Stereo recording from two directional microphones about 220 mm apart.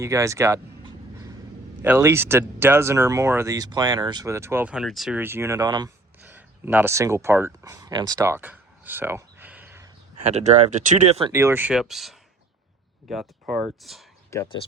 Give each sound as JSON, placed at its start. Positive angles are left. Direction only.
{"t": 0.0, "sound": "speech", "side_deg": -15}
{"t": 1.8, "sound": "speech", "side_deg": -10}
{"t": 6.3, "sound": "speech", "side_deg": -10}
{"t": 10.2, "sound": "speech", "side_deg": -30}
{"t": 11.3, "sound": "speech", "side_deg": -10}
{"t": 14.3, "sound": "speech", "side_deg": 15}